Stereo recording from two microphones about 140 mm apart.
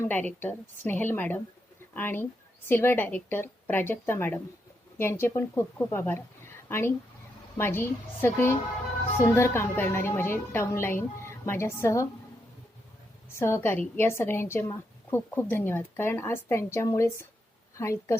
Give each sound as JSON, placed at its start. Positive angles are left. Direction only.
{"t": 0.0, "sound": "a woman's voice", "side_deg": 10}
{"t": 13.4, "sound": "a woman's voice", "side_deg": 15}